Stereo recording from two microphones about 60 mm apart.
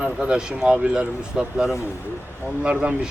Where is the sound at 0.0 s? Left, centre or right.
Centre.